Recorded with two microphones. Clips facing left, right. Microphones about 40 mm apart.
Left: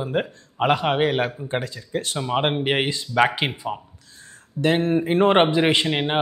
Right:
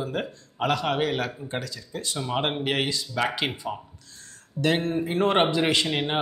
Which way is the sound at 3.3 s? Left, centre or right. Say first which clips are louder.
Left 3 dB; left.